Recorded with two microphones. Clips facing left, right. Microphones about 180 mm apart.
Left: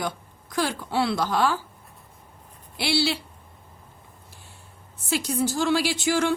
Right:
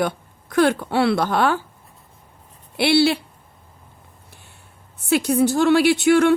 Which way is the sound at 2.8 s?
60° right (ahead or behind).